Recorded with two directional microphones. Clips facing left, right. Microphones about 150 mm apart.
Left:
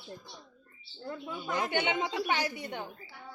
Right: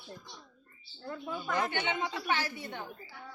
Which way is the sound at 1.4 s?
15° left (ahead or behind).